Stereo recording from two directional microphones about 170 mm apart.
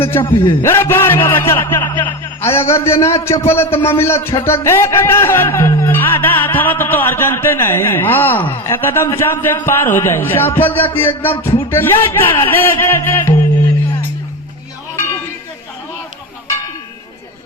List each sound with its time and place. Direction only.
0.0 s a man's voice: 15° left (ahead or behind)
0.3 s a man's voice: 30° left (ahead or behind)
0.6 s a man's voice: 15° left (ahead or behind)